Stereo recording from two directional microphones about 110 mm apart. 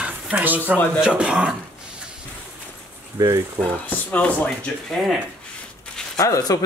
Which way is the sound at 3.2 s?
30° right (ahead or behind).